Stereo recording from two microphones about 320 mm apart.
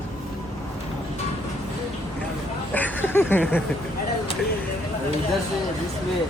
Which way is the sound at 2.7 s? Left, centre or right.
Centre.